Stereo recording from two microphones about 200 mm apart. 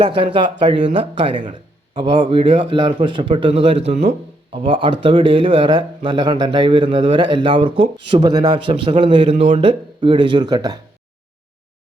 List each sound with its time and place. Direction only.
0.0 s speech: 25° right (ahead or behind)
9.3 s speech: 35° right (ahead or behind)
9.6 s speech: 25° right (ahead or behind)